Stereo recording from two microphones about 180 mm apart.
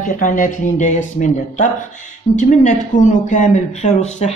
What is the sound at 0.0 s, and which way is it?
Speech, 45° left (ahead or behind).